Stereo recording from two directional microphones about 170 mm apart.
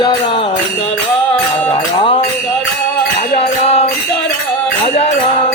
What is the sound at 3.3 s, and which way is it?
Music, 40° left (ahead or behind).